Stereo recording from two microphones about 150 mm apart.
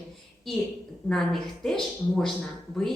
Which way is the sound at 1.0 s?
Centre (ahead or behind).